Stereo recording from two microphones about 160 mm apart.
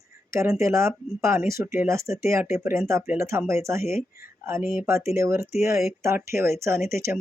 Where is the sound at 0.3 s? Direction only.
15° right (ahead or behind).